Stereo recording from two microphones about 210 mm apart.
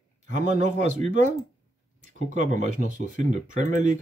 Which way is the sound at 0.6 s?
35° right (ahead or behind).